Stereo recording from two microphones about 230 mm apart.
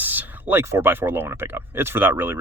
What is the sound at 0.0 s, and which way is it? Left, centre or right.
Speech, centre.